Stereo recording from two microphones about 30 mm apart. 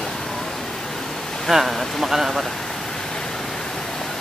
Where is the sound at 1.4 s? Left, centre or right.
Centre.